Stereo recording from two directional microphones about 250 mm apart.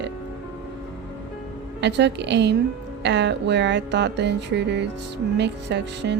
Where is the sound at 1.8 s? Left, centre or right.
Right.